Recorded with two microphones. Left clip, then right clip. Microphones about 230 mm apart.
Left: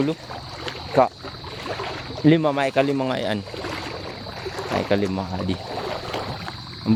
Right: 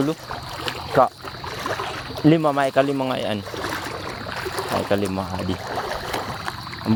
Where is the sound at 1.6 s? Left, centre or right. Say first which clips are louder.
Right 2 dB; right.